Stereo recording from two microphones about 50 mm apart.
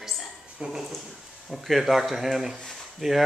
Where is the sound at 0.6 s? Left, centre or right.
Right.